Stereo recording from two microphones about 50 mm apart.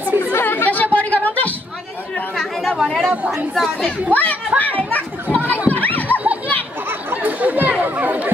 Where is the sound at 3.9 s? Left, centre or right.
Left.